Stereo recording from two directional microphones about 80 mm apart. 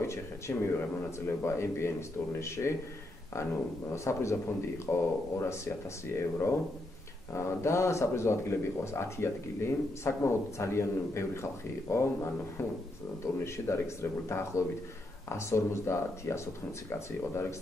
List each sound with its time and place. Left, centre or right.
0.0 s speech: left
3.9 s speech: left